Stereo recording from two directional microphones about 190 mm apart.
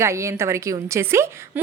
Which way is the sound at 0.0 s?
15° right (ahead or behind).